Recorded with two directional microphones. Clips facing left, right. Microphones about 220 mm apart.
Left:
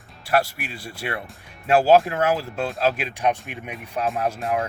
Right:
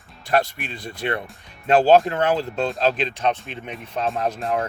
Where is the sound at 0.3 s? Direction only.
5° left (ahead or behind).